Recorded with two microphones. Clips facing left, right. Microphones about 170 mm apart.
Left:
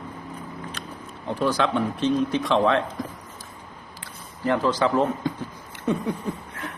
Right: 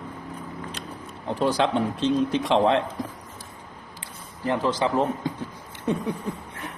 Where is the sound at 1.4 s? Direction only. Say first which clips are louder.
Even; 25° right (ahead or behind).